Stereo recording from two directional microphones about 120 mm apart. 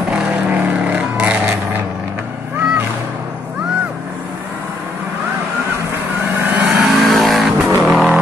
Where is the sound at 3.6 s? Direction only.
10° right (ahead or behind).